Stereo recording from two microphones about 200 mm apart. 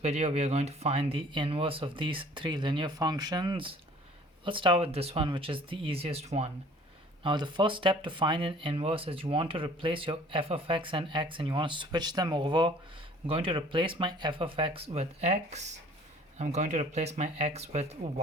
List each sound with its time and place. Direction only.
0.0 s speech: 30° right (ahead or behind)